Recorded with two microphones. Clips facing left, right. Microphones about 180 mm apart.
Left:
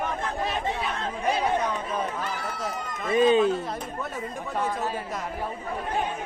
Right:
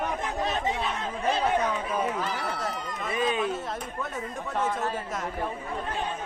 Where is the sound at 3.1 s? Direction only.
25° left (ahead or behind).